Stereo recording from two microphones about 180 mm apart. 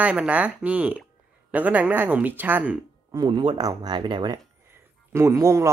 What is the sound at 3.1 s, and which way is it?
Speech, 25° right (ahead or behind).